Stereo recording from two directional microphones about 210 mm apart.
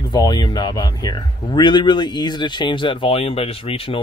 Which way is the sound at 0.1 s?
20° left (ahead or behind).